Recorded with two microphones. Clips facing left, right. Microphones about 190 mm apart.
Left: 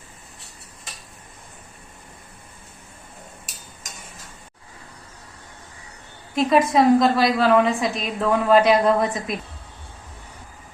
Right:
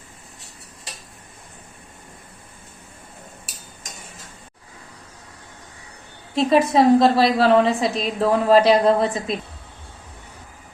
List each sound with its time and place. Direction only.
6.3 s a woman's voice: 30° right (ahead or behind)